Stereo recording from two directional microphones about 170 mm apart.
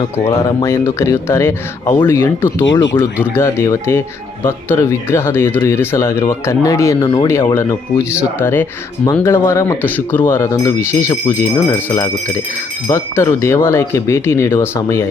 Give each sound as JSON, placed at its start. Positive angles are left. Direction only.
{"t": 0.3, "sound": "speech", "side_deg": 15}